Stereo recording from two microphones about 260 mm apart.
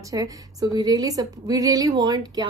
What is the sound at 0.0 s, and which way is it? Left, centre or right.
A woman's voice, centre.